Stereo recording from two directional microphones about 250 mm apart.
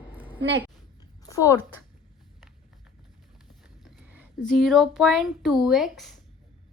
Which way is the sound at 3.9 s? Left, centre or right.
Centre.